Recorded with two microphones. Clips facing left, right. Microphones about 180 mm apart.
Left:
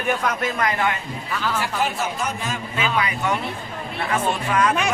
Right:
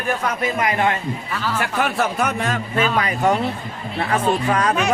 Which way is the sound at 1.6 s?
60° right (ahead or behind).